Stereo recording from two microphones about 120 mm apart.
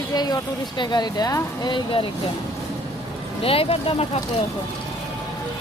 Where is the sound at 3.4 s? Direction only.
50° left (ahead or behind).